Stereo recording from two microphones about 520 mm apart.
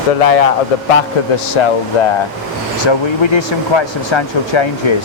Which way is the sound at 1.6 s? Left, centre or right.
Left.